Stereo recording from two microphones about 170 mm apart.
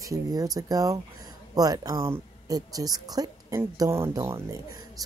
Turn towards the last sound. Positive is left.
turn(degrees=-20)  # may be behind; listen again after turning